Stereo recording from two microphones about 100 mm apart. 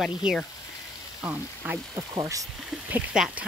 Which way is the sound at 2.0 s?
35° right (ahead or behind).